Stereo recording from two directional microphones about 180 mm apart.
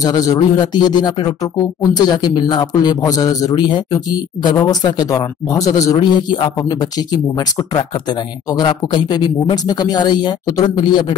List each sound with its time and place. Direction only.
0.0 s a man's voice: 20° left (ahead or behind)